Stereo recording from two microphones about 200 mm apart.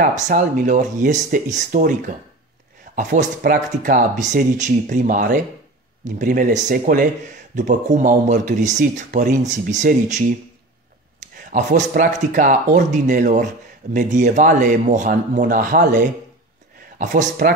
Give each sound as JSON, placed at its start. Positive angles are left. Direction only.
{"t": 0.0, "sound": "speech", "side_deg": -40}